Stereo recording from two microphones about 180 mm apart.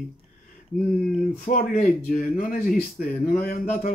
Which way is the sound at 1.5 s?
50° left (ahead or behind).